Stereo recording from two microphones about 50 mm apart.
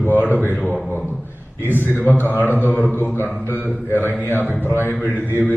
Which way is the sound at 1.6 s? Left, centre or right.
Left.